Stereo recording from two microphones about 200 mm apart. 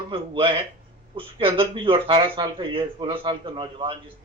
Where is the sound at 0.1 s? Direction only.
25° right (ahead or behind).